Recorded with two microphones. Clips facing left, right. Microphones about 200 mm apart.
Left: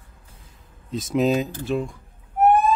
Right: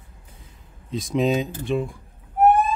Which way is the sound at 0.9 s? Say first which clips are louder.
Left 1 dB; centre (ahead or behind).